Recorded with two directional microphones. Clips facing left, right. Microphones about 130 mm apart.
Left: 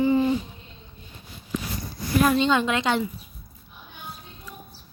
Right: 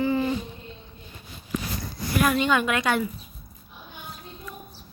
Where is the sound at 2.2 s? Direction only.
25° left (ahead or behind).